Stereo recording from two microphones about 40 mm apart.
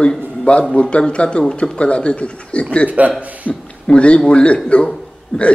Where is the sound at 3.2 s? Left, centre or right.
Right.